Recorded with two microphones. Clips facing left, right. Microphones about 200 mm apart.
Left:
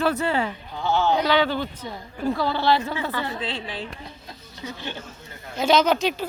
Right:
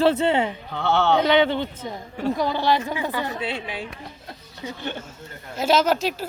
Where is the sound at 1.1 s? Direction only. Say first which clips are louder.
Right 3 dB; 20° right (ahead or behind).